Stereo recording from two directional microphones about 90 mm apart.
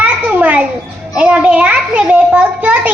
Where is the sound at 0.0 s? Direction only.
15° right (ahead or behind).